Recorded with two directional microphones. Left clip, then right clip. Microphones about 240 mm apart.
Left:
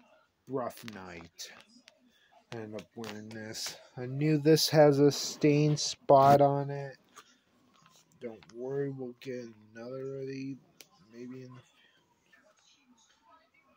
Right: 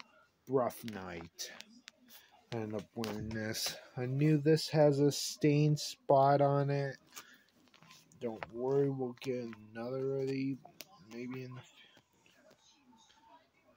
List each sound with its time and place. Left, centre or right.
0.5 s speech: centre
3.3 s speech: centre
4.4 s speech: left
6.5 s speech: centre
8.2 s speech: centre